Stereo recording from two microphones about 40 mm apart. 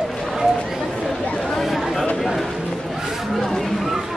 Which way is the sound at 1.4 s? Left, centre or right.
Centre.